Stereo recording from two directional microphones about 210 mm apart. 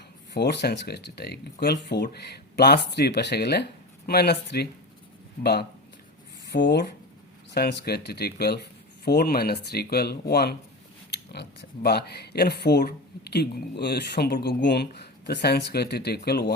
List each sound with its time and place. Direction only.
0.3 s speech: 50° left (ahead or behind)